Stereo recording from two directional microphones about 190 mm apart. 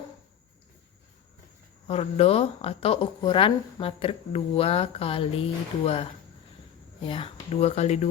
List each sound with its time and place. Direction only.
1.9 s speech: 30° left (ahead or behind)